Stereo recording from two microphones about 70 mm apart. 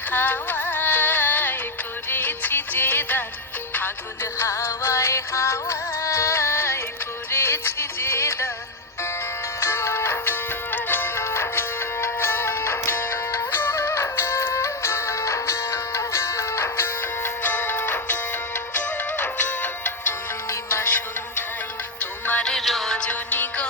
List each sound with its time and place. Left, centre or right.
0.1 s music: left
4.2 s music: left
9.6 s music: left
20.5 s music: left
22.4 s music: centre
23.0 s music: left